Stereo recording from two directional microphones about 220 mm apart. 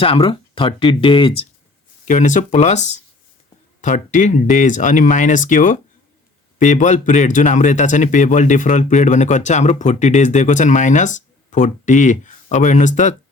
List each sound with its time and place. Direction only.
0.0 s speech: 25° left (ahead or behind)
2.0 s a man's voice: 35° left (ahead or behind)